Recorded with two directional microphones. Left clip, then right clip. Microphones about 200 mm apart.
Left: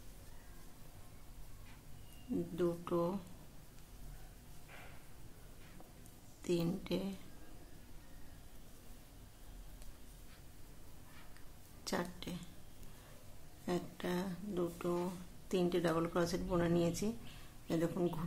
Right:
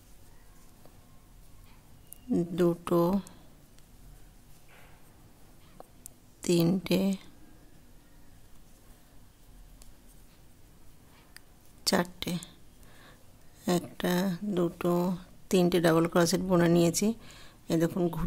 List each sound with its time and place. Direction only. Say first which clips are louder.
2.5 s speech: right 10 dB; 55° right (ahead or behind)
6.4 s speech: right 11 dB; 55° right (ahead or behind)
11.8 s a woman's voice: right 12 dB; 55° right (ahead or behind)
13.7 s speech: right 10 dB; 55° right (ahead or behind)